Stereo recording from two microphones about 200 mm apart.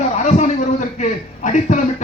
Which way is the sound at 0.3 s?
35° left (ahead or behind).